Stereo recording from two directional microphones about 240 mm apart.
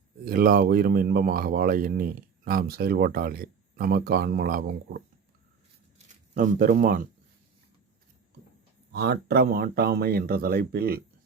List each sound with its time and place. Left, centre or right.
0.3 s speech: right
6.3 s speech: right
8.9 s speech: right